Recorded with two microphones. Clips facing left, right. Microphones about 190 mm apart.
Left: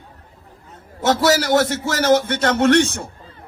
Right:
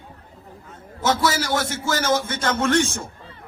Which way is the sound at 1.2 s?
70° left (ahead or behind).